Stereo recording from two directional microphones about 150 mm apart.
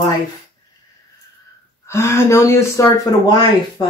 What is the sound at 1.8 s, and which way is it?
Speech, 20° left (ahead or behind).